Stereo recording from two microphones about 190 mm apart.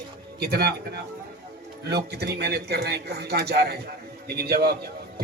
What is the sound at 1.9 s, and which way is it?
A man's voice, 60° right (ahead or behind).